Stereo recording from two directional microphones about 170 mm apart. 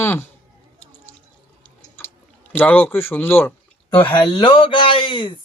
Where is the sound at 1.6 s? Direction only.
10° left (ahead or behind).